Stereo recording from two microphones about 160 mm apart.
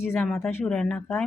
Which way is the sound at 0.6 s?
5° left (ahead or behind).